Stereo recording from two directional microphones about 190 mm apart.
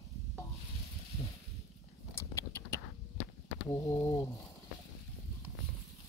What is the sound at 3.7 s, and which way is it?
Speech, 15° left (ahead or behind).